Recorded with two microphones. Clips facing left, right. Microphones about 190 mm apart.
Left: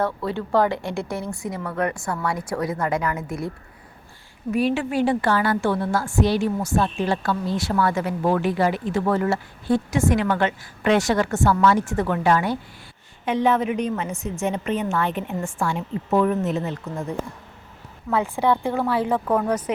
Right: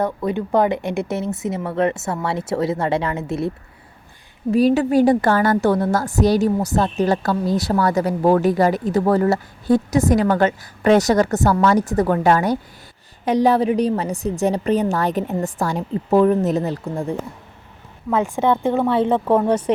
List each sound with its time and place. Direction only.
0.0 s speech: 15° right (ahead or behind)
4.5 s a woman's voice: 40° right (ahead or behind)
18.1 s a woman's voice: 10° right (ahead or behind)
18.6 s speech: 20° right (ahead or behind)